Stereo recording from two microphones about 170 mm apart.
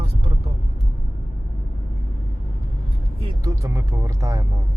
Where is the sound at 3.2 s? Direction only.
25° right (ahead or behind).